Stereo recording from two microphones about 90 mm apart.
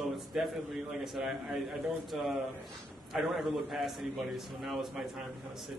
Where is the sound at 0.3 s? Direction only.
5° right (ahead or behind).